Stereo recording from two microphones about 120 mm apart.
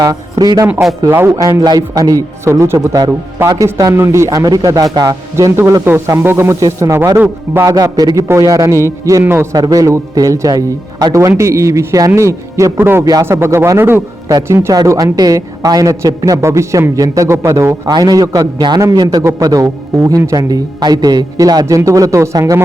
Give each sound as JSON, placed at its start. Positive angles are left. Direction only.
{"t": 0.0, "sound": "a man's voice", "side_deg": -30}
{"t": 0.7, "sound": "a man's voice", "side_deg": -5}
{"t": 1.0, "sound": "a man's voice", "side_deg": -25}
{"t": 1.5, "sound": "a man's voice", "side_deg": -35}